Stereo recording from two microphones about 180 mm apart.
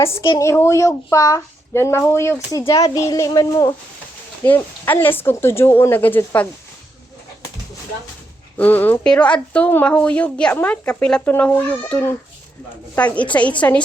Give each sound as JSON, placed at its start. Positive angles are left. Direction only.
{"t": 0.0, "sound": "a woman's voice", "side_deg": 15}
{"t": 4.4, "sound": "a woman's voice", "side_deg": 10}
{"t": 8.5, "sound": "a woman's voice", "side_deg": 10}